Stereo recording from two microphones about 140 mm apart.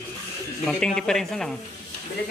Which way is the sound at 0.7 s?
5° left (ahead or behind).